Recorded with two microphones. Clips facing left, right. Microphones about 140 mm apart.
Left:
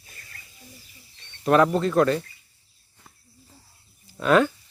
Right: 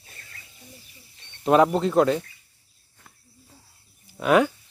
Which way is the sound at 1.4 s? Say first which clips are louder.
Right 1 dB; 20° right (ahead or behind).